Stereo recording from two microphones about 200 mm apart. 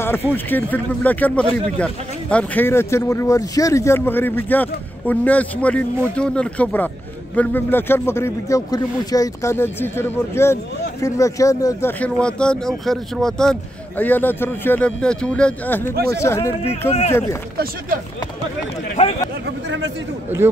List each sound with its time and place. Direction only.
0.0 s speech: 10° left (ahead or behind)
19.0 s speech: 35° left (ahead or behind)